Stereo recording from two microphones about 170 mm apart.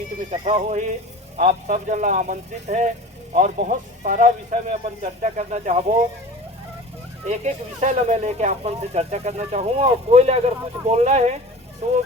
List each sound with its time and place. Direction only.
0.3 s speech: 40° right (ahead or behind)
7.3 s speech: 45° right (ahead or behind)